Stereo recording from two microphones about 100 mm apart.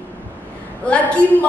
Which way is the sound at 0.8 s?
15° left (ahead or behind).